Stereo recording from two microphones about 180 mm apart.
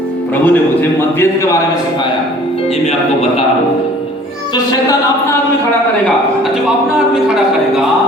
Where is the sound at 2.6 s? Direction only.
35° left (ahead or behind).